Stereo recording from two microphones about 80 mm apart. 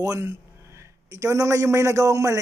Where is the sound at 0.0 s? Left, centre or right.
Right.